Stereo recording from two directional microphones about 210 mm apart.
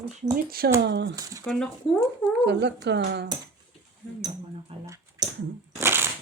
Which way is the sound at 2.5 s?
55° right (ahead or behind).